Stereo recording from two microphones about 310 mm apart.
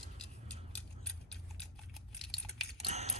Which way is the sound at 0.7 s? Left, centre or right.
Centre.